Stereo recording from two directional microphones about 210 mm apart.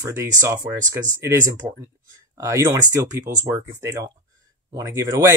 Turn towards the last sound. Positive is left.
turn(degrees=-15)  # may be behind; listen again after turning